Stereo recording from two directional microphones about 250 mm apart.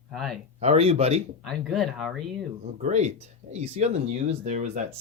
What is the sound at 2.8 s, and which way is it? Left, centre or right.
Speech, right.